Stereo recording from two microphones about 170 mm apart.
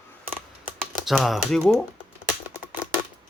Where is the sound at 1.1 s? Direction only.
Centre (ahead or behind).